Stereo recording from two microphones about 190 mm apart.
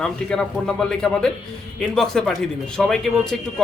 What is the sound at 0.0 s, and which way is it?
Speech, 5° left (ahead or behind).